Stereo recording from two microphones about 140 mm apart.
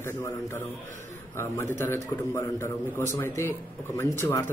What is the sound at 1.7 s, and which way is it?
A man's voice, 20° left (ahead or behind).